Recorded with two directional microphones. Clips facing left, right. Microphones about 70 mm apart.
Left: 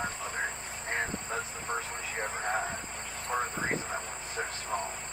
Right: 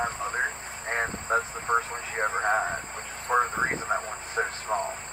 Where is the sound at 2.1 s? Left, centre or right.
Right.